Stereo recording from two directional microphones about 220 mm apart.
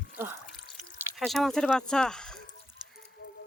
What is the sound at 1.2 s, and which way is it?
Speech, centre (ahead or behind).